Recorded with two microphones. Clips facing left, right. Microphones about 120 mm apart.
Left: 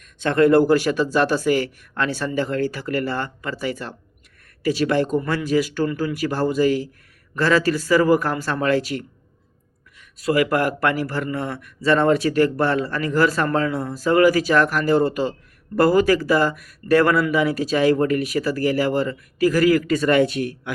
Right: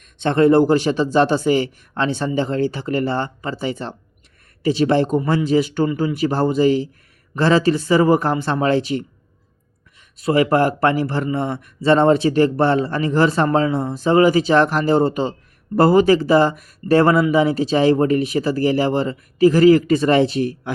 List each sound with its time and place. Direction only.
0.0 s a man's voice: 25° right (ahead or behind)